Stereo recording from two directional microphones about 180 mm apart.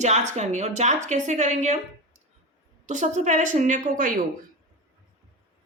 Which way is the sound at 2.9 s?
45° right (ahead or behind).